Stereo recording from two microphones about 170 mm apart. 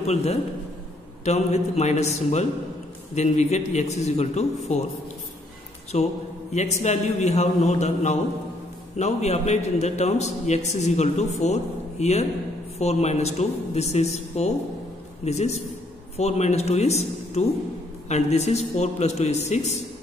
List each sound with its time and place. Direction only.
0.0 s a man's voice: 40° left (ahead or behind)
5.9 s a man's voice: 40° left (ahead or behind)